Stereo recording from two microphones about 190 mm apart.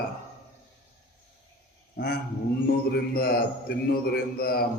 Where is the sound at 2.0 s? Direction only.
55° left (ahead or behind).